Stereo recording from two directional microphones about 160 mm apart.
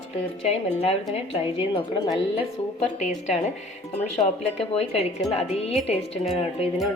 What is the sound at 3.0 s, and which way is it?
Speech, 45° left (ahead or behind).